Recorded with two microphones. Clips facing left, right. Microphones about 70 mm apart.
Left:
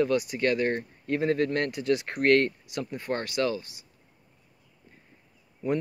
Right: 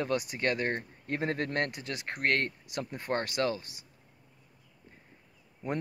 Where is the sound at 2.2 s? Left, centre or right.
Centre.